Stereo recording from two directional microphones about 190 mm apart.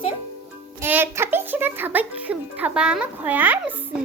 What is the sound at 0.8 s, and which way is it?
A child's voice, 10° right (ahead or behind).